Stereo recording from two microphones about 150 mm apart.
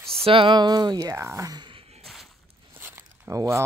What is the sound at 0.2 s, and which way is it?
Speech, 35° right (ahead or behind).